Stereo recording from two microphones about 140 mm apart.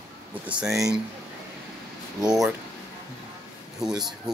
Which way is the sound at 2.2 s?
5° right (ahead or behind).